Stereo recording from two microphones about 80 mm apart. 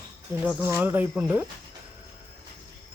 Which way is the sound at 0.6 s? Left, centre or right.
Right.